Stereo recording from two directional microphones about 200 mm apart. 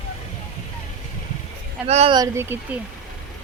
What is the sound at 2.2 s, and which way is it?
Speech, 10° right (ahead or behind).